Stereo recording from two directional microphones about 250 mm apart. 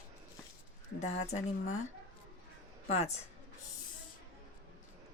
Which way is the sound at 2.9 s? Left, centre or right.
Left.